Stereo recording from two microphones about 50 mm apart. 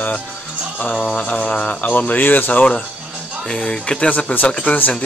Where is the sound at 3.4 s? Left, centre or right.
Centre; by 4.9 s left.